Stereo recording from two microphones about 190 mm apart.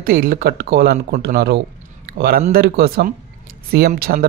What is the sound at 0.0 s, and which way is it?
Speech, 50° right (ahead or behind).